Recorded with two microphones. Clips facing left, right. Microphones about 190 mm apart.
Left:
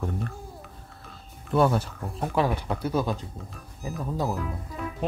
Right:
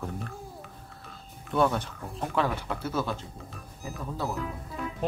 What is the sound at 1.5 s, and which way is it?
Speech, centre (ahead or behind).